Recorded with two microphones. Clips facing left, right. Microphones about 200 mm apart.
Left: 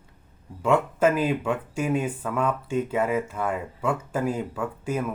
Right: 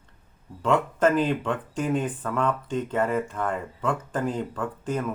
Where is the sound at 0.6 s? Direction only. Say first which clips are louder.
Left 1 dB; 10° left (ahead or behind).